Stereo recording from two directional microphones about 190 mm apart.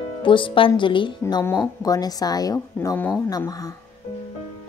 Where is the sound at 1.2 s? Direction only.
15° left (ahead or behind).